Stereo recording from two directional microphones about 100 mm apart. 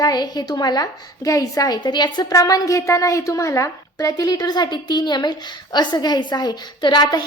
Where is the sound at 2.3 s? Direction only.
35° left (ahead or behind).